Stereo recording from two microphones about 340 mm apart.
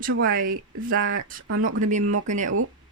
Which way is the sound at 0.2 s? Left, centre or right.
Right.